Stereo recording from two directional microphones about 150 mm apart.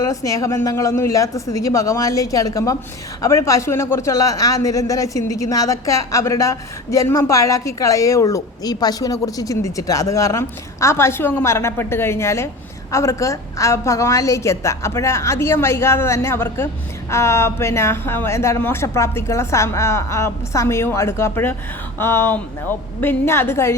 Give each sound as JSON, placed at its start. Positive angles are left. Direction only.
{"t": 0.0, "sound": "speech", "side_deg": 20}